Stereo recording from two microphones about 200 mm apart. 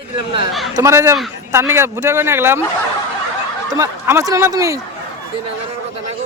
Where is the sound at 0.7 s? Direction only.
15° right (ahead or behind).